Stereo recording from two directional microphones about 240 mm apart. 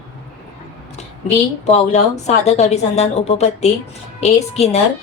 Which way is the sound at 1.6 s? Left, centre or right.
Left.